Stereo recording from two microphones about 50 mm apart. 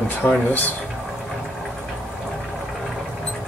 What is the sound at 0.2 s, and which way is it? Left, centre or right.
Speech, left.